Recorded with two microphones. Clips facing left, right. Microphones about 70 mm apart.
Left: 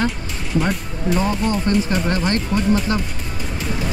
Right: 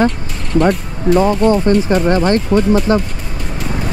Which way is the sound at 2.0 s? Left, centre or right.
Right.